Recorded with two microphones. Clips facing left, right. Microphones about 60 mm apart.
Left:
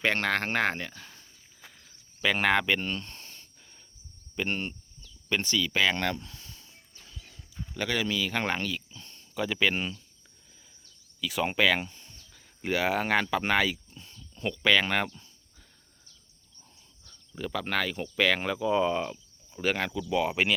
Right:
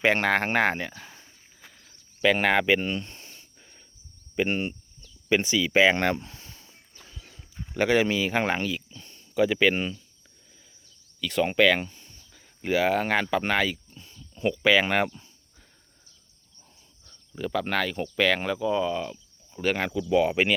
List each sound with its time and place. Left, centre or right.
0.0 s speech: centre
1.6 s a sound: centre
4.4 s speech: centre
7.7 s speech: right; by 10.0 s centre
11.2 s speech: centre
17.3 s speech: centre
18.7 s speech: centre
19.5 s speech: centre
19.9 s speech: centre